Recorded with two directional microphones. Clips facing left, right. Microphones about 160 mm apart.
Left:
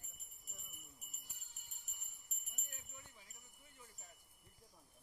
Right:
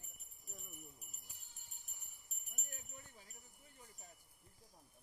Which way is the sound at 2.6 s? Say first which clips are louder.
Right 3 dB; 40° right (ahead or behind).